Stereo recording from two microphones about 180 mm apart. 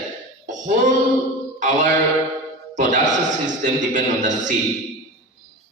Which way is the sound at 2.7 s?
45° right (ahead or behind).